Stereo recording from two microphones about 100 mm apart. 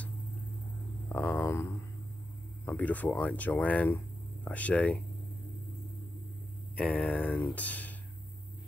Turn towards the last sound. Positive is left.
turn(degrees=15)  # may be behind; listen again after turning